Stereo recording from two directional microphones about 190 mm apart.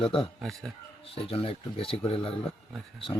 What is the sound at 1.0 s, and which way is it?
Speech, 30° left (ahead or behind).